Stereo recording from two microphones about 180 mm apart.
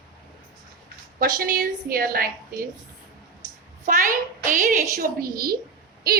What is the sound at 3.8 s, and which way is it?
A woman's voice, 50° right (ahead or behind).